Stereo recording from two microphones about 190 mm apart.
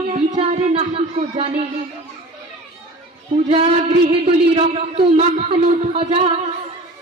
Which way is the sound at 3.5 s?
30° right (ahead or behind).